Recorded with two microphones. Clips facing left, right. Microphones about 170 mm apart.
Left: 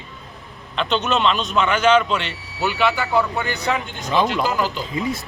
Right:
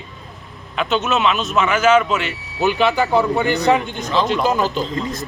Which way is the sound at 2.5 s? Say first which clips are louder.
Right 4 dB; 15° right (ahead or behind).